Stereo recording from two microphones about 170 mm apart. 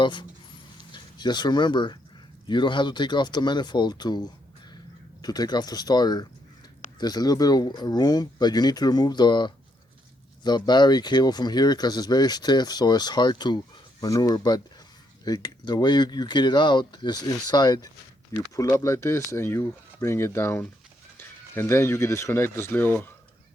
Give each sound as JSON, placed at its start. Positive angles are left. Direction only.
{"t": 0.0, "sound": "speech", "side_deg": 25}